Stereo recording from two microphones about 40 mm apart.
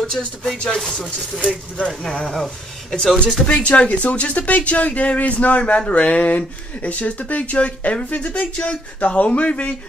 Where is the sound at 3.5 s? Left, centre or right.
Left.